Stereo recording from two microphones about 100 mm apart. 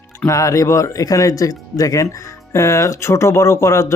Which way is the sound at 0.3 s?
35° left (ahead or behind).